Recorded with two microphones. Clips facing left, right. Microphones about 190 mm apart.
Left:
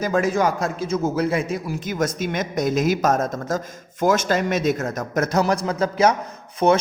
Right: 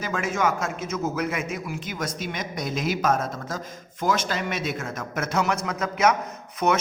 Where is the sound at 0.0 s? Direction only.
35° left (ahead or behind).